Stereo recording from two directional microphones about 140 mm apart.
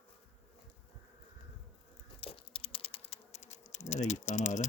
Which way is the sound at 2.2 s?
40° left (ahead or behind).